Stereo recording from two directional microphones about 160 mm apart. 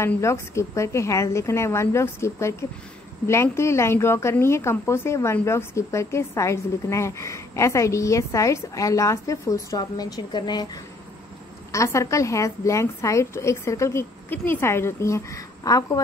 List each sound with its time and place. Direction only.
0.0 s a woman's voice: 15° left (ahead or behind)